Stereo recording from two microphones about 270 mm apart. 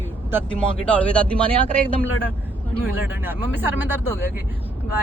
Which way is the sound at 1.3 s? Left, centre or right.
Centre.